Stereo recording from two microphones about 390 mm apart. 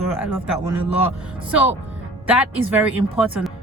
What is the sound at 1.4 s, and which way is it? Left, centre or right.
Speech, centre.